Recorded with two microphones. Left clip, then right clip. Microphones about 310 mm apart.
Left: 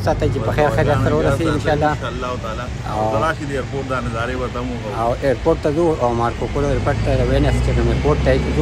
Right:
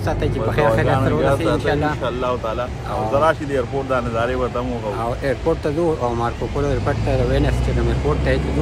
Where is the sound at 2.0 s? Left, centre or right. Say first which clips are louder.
Right 3 dB; centre.